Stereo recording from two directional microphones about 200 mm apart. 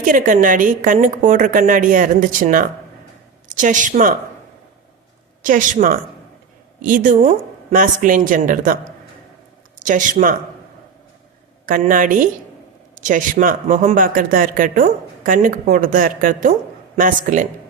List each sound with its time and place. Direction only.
0.0 s a woman's voice: 40° right (ahead or behind)
5.4 s a woman's voice: 40° right (ahead or behind)
9.8 s a woman's voice: 40° right (ahead or behind)
11.6 s a woman's voice: 45° right (ahead or behind)